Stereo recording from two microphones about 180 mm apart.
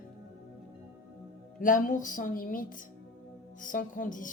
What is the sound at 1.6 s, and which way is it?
A woman's voice, 45° left (ahead or behind).